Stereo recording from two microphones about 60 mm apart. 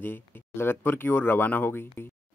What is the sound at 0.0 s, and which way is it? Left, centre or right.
Speech, left.